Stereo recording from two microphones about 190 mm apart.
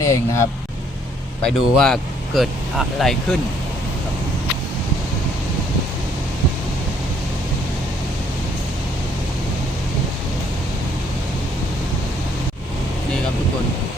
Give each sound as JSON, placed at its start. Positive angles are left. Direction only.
{"t": 0.0, "sound": "speech", "side_deg": 15}
{"t": 1.4, "sound": "speech", "side_deg": 5}